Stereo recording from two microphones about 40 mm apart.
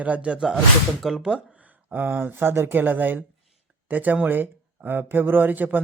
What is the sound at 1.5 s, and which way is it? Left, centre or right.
Speech, right.